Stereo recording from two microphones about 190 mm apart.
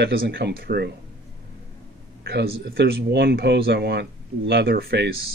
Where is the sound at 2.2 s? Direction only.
55° right (ahead or behind).